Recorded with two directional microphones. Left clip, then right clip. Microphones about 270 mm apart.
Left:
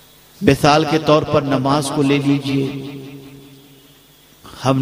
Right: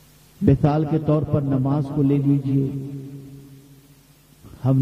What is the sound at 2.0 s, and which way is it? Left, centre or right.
Speech, centre.